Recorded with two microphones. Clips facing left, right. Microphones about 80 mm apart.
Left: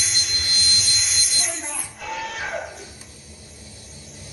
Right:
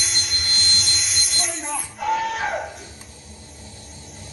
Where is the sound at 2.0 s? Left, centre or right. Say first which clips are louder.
Right 8 dB; right.